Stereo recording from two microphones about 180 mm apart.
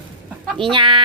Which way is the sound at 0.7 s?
25° right (ahead or behind).